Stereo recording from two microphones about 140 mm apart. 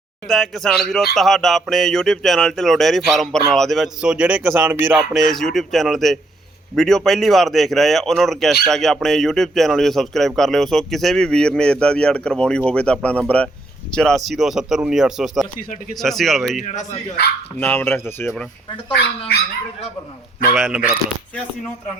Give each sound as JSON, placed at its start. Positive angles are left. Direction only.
{"t": 0.3, "sound": "speech", "side_deg": 0}
{"t": 5.3, "sound": "speech", "side_deg": 0}
{"t": 15.5, "sound": "speech", "side_deg": 75}
{"t": 16.0, "sound": "speech", "side_deg": 0}
{"t": 16.6, "sound": "speech", "side_deg": 55}
{"t": 17.6, "sound": "speech", "side_deg": 15}
{"t": 20.6, "sound": "speech", "side_deg": -5}